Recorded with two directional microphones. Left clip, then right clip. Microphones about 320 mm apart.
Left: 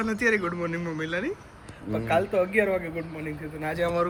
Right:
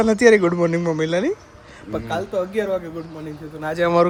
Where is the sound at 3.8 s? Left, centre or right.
Right.